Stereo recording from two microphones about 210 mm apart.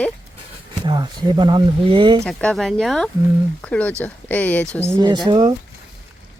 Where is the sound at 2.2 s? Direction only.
Centre (ahead or behind).